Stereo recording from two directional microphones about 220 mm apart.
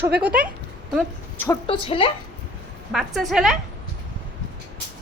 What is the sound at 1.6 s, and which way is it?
Speech, 25° left (ahead or behind).